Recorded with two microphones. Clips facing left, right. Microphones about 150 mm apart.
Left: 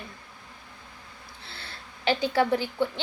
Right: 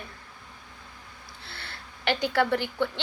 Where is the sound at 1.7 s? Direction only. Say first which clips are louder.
Left 2 dB; 65° right (ahead or behind).